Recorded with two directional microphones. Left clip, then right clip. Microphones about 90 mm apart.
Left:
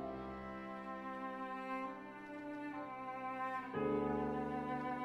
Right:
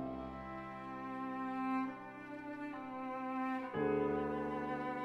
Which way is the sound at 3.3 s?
15° right (ahead or behind).